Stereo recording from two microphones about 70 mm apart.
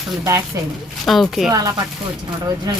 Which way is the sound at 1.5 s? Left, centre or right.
Right.